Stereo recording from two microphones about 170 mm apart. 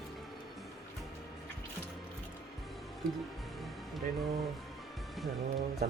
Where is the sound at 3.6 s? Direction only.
Centre (ahead or behind).